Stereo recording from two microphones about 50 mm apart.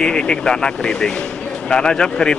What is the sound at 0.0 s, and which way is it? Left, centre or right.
Speech, centre.